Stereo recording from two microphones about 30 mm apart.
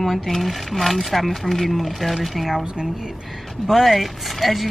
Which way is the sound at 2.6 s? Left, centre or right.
Right.